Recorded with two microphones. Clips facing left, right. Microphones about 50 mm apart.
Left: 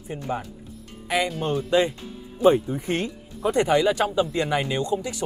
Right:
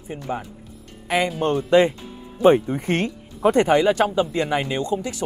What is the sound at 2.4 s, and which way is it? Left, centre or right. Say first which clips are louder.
Speech: right 3 dB; right.